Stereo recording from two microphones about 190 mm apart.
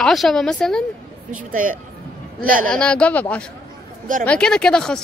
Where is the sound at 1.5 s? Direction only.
45° right (ahead or behind).